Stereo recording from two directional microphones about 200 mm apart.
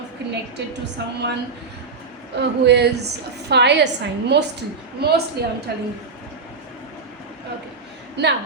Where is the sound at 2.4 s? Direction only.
55° right (ahead or behind).